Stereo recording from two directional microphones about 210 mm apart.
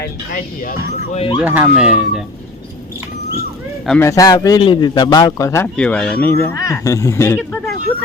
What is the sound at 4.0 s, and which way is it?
Speech, 15° left (ahead or behind).